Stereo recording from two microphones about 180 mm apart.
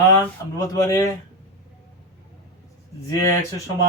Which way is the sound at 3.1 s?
15° left (ahead or behind).